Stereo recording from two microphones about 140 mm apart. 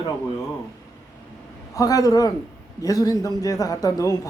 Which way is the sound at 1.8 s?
25° left (ahead or behind).